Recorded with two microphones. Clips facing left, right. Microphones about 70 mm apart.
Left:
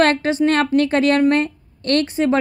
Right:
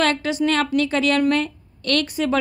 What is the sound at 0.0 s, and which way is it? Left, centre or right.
A woman's voice, left.